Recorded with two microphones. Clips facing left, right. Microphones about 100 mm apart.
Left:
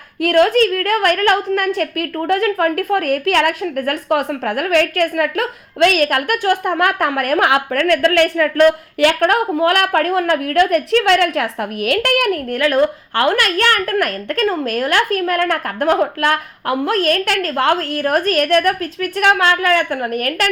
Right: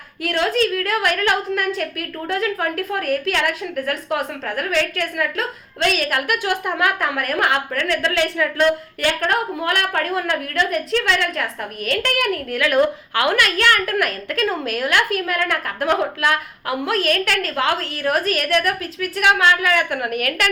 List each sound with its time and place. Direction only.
0.2 s a woman's voice: 50° left (ahead or behind)
6.2 s a woman's voice: 45° left (ahead or behind)
13.1 s a woman's voice: 45° left (ahead or behind)
19.9 s a woman's voice: 35° left (ahead or behind)